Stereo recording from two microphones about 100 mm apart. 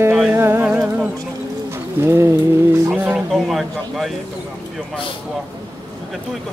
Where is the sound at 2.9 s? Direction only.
15° right (ahead or behind).